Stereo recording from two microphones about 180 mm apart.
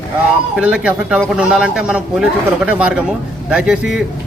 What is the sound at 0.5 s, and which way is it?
A man's voice, 5° right (ahead or behind).